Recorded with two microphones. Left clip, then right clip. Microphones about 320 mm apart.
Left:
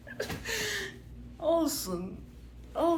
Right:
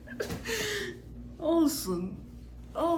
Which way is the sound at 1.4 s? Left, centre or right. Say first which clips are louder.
Right 1 dB; centre.